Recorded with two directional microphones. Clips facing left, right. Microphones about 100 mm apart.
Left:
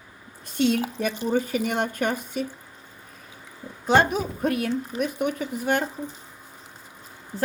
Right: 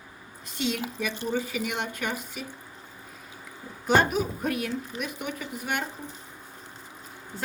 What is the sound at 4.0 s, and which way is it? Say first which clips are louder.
Speech: left 3 dB; 30° left (ahead or behind).